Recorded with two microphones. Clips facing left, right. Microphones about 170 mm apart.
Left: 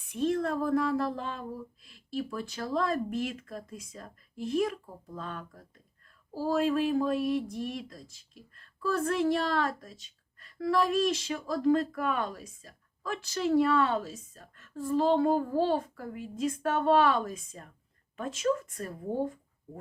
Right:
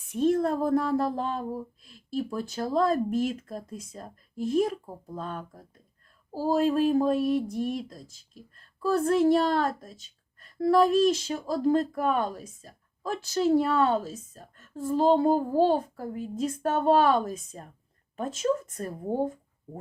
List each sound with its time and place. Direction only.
0.1 s a woman's voice: 45° right (ahead or behind)